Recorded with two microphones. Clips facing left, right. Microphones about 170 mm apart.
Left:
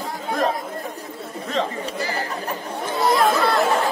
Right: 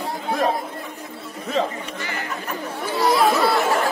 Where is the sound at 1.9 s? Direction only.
35° left (ahead or behind).